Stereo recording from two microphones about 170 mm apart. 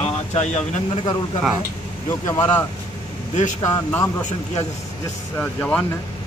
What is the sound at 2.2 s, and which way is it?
Speech, 15° left (ahead or behind).